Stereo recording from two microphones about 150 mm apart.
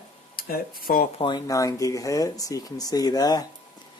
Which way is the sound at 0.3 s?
75° left (ahead or behind).